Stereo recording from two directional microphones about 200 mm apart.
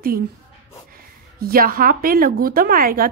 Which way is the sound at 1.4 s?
45° right (ahead or behind).